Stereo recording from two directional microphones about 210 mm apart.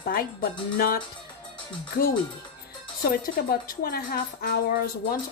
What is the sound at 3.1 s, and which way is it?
A woman's voice, 45° left (ahead or behind).